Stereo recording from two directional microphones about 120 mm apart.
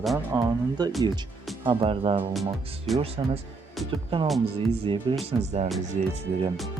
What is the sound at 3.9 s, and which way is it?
Speech, 45° right (ahead or behind).